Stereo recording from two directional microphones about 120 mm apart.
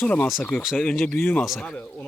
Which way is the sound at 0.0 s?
10° left (ahead or behind).